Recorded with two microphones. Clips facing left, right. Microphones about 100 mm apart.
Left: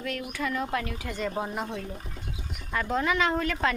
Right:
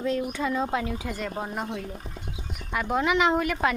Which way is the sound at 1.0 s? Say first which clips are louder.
Left 1 dB; 5° right (ahead or behind).